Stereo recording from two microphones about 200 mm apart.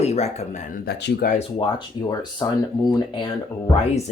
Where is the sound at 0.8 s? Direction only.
55° left (ahead or behind).